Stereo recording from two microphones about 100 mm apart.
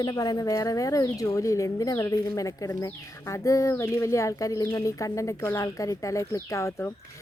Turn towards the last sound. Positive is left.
turn(degrees=25)  # may be behind; listen again after turning